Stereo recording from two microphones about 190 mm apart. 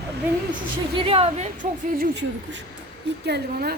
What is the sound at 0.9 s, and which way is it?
Speech, 30° right (ahead or behind).